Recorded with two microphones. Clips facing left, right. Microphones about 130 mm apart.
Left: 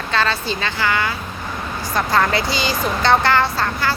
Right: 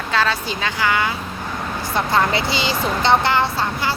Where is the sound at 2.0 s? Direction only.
25° right (ahead or behind).